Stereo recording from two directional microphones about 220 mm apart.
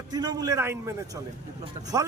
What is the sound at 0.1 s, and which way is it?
Speech, 20° right (ahead or behind).